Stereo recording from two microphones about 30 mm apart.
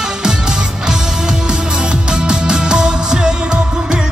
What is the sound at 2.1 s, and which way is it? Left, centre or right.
Music, right.